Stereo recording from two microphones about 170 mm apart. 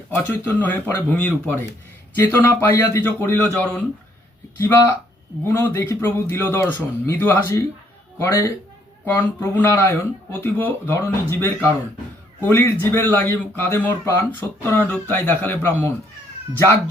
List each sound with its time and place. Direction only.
0.2 s speech: 10° left (ahead or behind)